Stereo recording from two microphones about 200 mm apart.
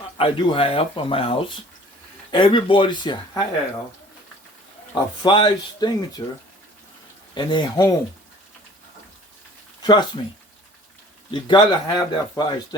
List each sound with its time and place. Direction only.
0.2 s speech: 25° left (ahead or behind)
4.9 s speech: 25° left (ahead or behind)
7.3 s speech: 20° left (ahead or behind)
9.8 s speech: 20° left (ahead or behind)
11.3 s speech: 25° left (ahead or behind)